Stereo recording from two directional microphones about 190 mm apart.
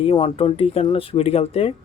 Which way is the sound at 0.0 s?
30° left (ahead or behind).